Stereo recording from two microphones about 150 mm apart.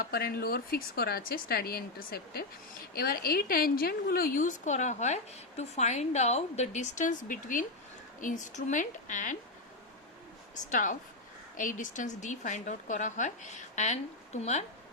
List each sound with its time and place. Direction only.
0.0 s a woman's voice: 90° left; by 9.4 s 60° left (ahead or behind)
10.5 s a woman's voice: 55° left (ahead or behind)